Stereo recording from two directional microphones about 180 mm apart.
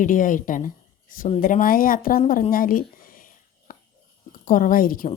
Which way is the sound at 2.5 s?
50° left (ahead or behind).